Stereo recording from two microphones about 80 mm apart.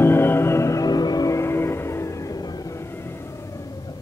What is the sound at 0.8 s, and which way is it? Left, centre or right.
Vehicle, left.